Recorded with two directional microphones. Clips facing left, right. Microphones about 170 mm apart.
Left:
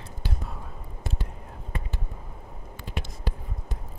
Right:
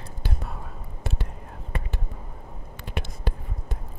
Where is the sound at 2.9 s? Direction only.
60° right (ahead or behind).